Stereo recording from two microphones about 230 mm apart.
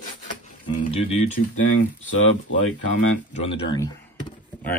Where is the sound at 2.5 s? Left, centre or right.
Left.